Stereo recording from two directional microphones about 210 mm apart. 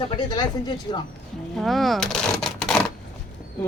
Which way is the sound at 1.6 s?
Centre (ahead or behind).